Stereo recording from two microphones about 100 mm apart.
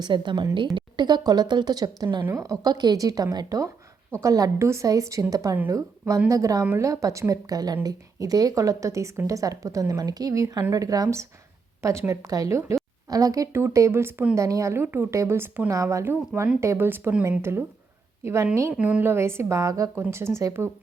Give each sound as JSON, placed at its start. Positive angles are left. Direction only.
{"t": 0.0, "sound": "speech", "side_deg": -50}
{"t": 18.7, "sound": "speech", "side_deg": -15}